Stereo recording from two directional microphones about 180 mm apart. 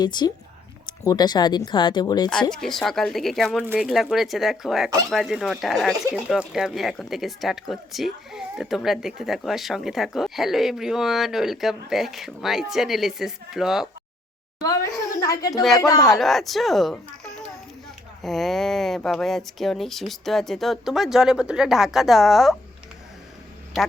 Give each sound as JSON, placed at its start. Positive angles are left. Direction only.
{"t": 0.0, "sound": "speech", "side_deg": 25}
{"t": 2.3, "sound": "speech", "side_deg": 5}
{"t": 15.2, "sound": "speech", "side_deg": 20}
{"t": 16.0, "sound": "speech", "side_deg": 0}
{"t": 18.2, "sound": "speech", "side_deg": 0}